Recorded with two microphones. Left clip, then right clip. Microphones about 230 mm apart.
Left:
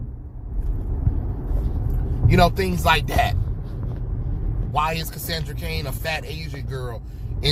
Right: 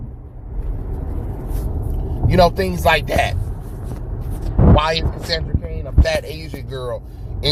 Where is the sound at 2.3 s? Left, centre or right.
Centre.